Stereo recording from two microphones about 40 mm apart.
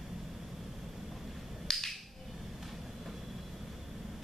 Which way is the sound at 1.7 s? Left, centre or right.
Centre.